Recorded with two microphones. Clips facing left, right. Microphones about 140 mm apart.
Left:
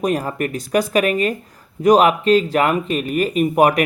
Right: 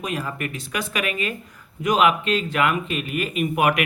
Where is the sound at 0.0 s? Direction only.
40° left (ahead or behind).